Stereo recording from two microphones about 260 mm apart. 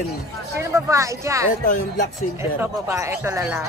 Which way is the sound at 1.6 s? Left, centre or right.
Left.